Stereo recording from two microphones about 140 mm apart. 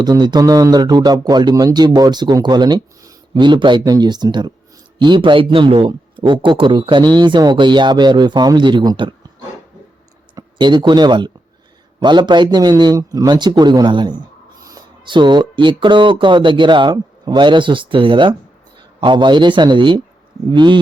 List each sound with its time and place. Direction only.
0.0 s a man's voice: 30° right (ahead or behind)
10.3 s a man's voice: 30° right (ahead or behind)